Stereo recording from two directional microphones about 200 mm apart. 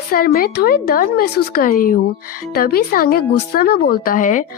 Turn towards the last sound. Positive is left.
turn(degrees=40)  # may be behind; listen again after turning